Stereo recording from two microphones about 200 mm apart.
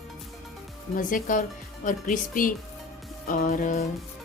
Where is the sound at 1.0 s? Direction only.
40° left (ahead or behind).